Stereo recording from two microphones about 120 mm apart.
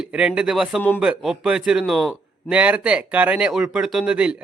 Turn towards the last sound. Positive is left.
turn(degrees=-10)  # may be behind; listen again after turning